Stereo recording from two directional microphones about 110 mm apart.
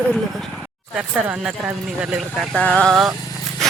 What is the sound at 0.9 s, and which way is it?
Speech, 5° right (ahead or behind).